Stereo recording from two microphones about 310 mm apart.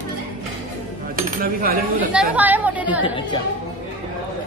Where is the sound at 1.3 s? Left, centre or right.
Right.